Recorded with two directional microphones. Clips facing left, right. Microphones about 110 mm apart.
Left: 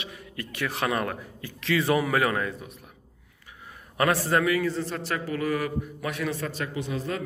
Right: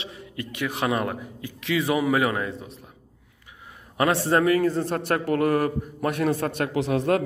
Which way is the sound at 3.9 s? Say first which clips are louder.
Right 2 dB; 25° right (ahead or behind).